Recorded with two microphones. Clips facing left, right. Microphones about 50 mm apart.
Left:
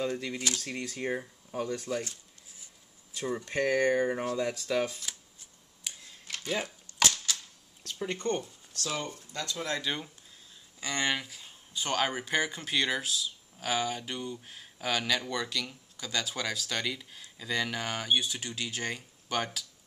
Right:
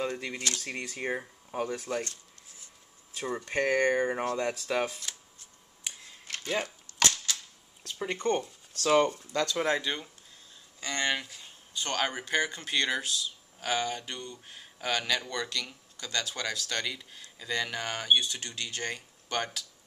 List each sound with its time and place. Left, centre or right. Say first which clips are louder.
0.1 s speech: left 1 dB; centre
3.2 s speech: even; centre
4.5 s speech: even; centre
5.9 s a sound: right 1 dB; centre
6.3 s a sound: right 1 dB; centre
7.8 s a sound: right 1 dB; centre
8.2 s speech: right 4 dB; right
8.8 s speech: right 12 dB; right
9.9 s speech: even; centre